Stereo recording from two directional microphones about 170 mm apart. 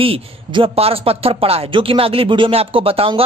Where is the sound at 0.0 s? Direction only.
30° right (ahead or behind).